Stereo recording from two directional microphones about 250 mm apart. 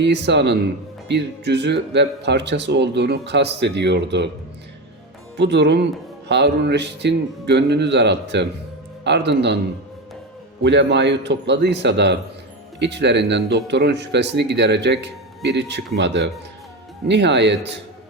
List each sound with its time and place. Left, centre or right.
0.0 s speech: right
5.4 s speech: right
10.6 s speech: right